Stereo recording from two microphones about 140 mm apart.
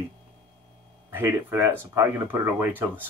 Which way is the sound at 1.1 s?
20° right (ahead or behind).